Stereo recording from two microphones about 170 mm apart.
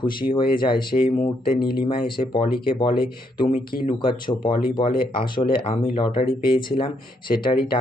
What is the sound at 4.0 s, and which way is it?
Speech, 30° left (ahead or behind).